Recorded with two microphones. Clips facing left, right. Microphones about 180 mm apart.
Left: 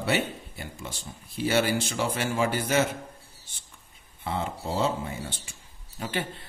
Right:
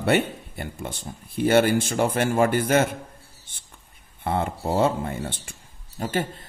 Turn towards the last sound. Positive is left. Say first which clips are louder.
# right 5 dB
turn(degrees=-45)  # may be behind; listen again after turning